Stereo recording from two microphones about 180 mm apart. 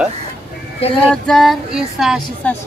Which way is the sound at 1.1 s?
Centre (ahead or behind).